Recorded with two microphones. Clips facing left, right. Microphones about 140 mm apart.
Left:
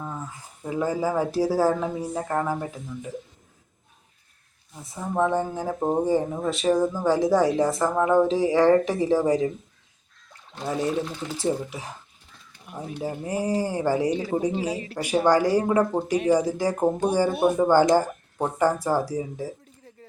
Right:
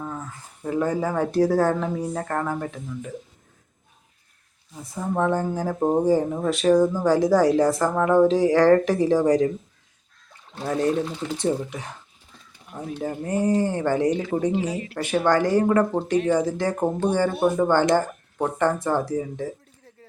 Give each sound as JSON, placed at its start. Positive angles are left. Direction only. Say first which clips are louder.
{"t": 0.6, "sound": "speech", "louder": "right 1 dB", "side_deg": 5}
{"t": 4.8, "sound": "speech", "louder": "even", "side_deg": 0}
{"t": 10.6, "sound": "speech", "louder": "right 3 dB", "side_deg": 5}
{"t": 14.2, "sound": "speech", "louder": "right 2 dB", "side_deg": 25}
{"t": 15.0, "sound": "speech", "louder": "left 1 dB", "side_deg": 10}